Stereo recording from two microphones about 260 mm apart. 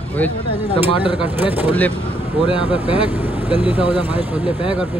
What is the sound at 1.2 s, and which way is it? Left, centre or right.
Speech, centre.